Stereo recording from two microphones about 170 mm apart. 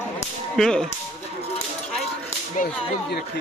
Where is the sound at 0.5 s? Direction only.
5° left (ahead or behind).